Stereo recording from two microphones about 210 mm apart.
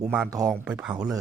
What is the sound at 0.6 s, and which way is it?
Speech, 5° right (ahead or behind).